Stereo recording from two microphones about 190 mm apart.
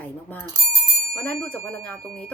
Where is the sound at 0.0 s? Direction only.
10° left (ahead or behind).